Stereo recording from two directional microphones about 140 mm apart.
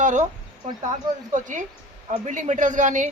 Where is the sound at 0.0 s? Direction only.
60° right (ahead or behind).